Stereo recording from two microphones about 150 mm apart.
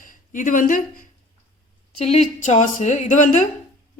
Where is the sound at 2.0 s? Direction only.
45° left (ahead or behind).